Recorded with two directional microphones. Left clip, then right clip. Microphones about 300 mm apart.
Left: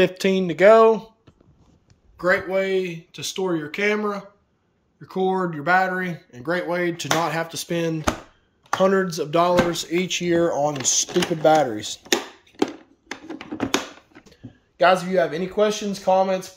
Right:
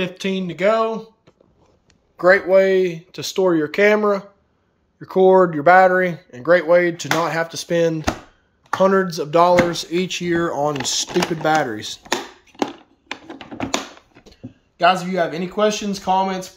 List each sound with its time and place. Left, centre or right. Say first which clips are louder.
0.0 s speech: left 5 dB; centre
2.1 s speech: right 8 dB; centre
14.3 s speech: right 5 dB; centre